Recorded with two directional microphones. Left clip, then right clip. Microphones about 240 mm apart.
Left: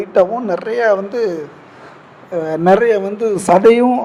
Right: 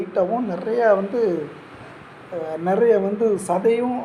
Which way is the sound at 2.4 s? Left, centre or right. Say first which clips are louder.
Left 7 dB; left.